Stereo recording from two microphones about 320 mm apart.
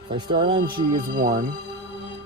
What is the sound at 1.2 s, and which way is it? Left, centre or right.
Speech, right.